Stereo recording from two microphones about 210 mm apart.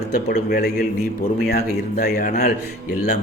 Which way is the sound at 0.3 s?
45° left (ahead or behind).